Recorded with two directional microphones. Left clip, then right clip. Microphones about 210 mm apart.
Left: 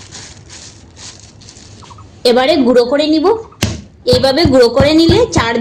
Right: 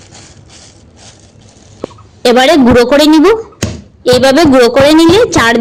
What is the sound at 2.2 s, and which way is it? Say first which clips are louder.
Speech: right 4 dB; 30° right (ahead or behind).